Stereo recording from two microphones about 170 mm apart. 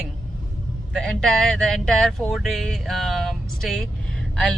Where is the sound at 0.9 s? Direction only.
5° left (ahead or behind).